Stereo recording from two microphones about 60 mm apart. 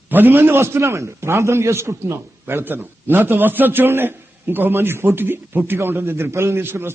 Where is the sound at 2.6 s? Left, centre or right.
Right.